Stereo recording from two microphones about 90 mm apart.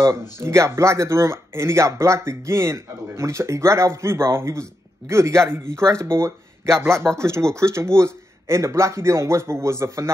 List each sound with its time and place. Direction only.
0.4 s speech: 30° right (ahead or behind)